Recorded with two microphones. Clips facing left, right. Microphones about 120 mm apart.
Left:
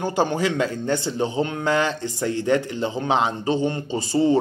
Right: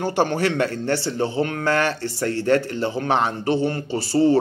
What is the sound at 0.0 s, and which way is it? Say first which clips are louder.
A man's voice: right 1 dB; 15° left (ahead or behind).